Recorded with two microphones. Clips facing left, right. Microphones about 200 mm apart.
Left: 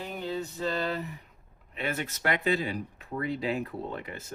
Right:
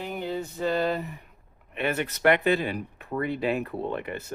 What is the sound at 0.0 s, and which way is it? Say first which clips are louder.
Male singing: right 3 dB; 60° right (ahead or behind).